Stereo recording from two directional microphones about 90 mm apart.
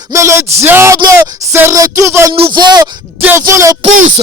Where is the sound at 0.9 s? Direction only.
45° right (ahead or behind).